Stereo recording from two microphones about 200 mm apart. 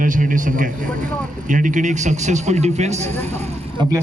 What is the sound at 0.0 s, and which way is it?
A man's voice, 40° right (ahead or behind).